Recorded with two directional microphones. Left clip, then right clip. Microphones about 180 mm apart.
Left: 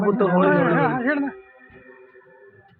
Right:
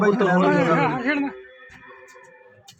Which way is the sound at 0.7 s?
15° left (ahead or behind).